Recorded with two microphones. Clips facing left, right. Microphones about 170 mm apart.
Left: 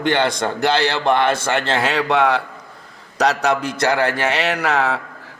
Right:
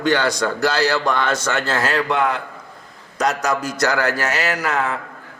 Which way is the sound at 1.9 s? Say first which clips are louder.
Left 4 dB; 75° left (ahead or behind).